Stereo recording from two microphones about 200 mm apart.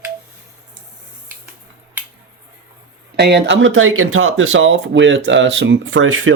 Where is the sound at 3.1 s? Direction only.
55° right (ahead or behind).